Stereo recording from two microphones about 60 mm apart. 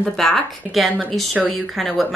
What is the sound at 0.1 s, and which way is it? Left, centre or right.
Speech, centre.